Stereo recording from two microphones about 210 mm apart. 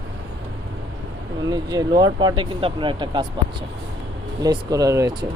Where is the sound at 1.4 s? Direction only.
20° right (ahead or behind).